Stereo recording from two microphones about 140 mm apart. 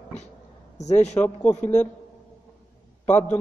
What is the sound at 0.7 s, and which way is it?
Speech, 55° left (ahead or behind).